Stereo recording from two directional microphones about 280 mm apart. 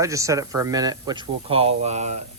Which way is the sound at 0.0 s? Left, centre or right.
Centre.